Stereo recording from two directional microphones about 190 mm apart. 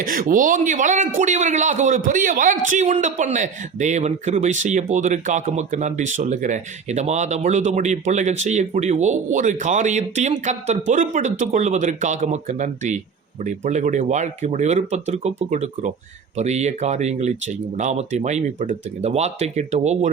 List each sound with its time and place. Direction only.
0.0 s a man's voice: 45° right (ahead or behind)